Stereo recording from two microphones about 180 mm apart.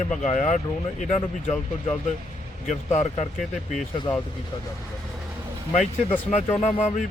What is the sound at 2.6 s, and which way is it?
Speech, 40° left (ahead or behind).